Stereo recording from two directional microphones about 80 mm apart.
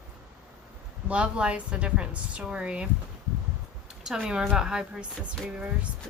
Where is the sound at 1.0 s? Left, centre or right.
Centre.